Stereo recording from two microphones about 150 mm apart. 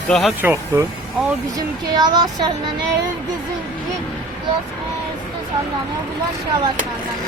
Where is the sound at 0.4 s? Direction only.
20° right (ahead or behind).